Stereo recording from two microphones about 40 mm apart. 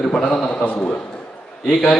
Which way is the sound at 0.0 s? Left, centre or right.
Centre.